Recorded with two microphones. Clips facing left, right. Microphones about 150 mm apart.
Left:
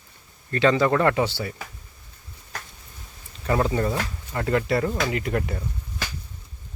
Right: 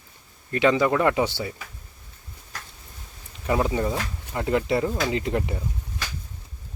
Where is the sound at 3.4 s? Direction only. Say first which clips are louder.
Left 1 dB; 15° right (ahead or behind).